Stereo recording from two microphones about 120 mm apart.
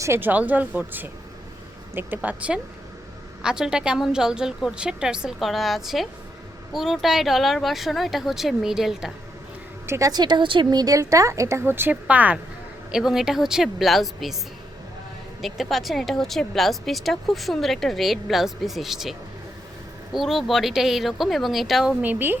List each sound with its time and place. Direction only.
0.0 s speech: 20° right (ahead or behind); by 9.1 s 5° right (ahead or behind)
9.8 s speech: 20° right (ahead or behind)
10.1 s speech: 40° right (ahead or behind); by 14.3 s centre (ahead or behind)
15.4 s speech: centre (ahead or behind)
20.1 s speech: centre (ahead or behind)
22.0 s speech: 15° right (ahead or behind)